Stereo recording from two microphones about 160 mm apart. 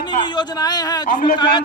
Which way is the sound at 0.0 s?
30° left (ahead or behind).